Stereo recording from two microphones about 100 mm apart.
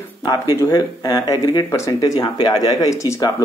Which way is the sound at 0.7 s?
40° left (ahead or behind).